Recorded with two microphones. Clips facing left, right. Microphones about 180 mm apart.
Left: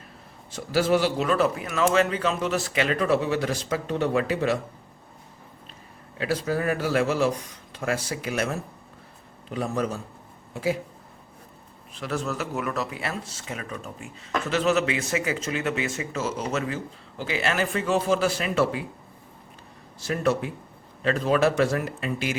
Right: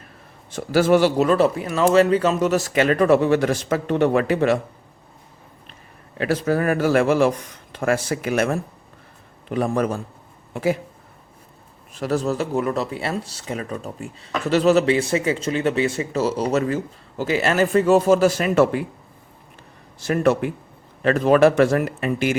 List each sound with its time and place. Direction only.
0.5 s a man's voice: 50° right (ahead or behind)
6.1 s a man's voice: 60° right (ahead or behind)
11.9 s speech: 35° right (ahead or behind)
20.1 s speech: 55° right (ahead or behind)